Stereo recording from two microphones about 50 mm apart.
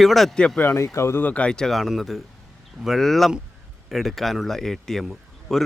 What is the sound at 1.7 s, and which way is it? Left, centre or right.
A man's voice, centre.